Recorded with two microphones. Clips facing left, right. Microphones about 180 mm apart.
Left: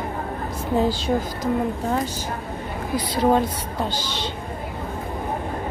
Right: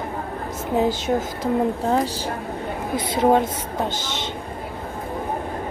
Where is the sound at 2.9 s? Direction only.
25° right (ahead or behind).